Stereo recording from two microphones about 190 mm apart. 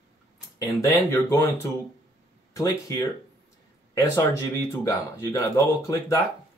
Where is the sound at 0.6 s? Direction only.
20° left (ahead or behind).